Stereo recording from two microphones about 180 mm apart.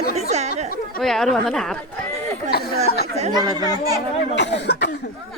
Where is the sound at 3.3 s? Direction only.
20° right (ahead or behind).